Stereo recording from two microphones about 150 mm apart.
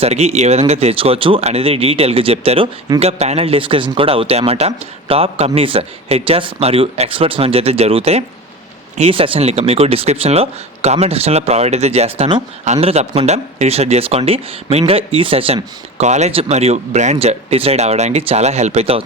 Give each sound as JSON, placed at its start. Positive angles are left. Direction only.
{"t": 0.0, "sound": "a man's voice", "side_deg": -45}